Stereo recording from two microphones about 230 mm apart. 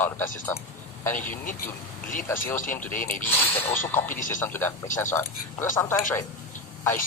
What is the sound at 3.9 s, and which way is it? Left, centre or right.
Speech, centre.